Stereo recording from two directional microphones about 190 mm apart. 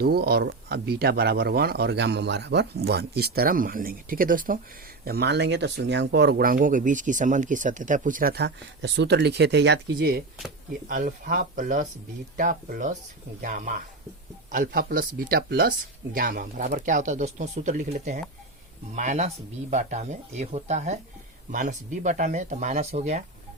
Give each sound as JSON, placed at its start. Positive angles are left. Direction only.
{"t": 0.0, "sound": "speech", "side_deg": -55}
{"t": 5.0, "sound": "speech", "side_deg": -55}
{"t": 10.8, "sound": "speech", "side_deg": -45}